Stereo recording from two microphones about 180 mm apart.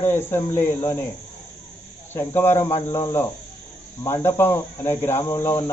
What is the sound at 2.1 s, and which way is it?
Speech, 15° left (ahead or behind).